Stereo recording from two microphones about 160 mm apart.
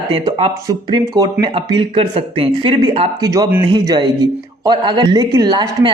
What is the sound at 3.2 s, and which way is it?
A woman's voice, 25° right (ahead or behind).